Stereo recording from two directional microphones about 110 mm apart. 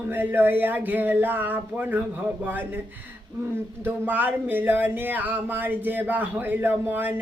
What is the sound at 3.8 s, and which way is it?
Speech, 15° right (ahead or behind).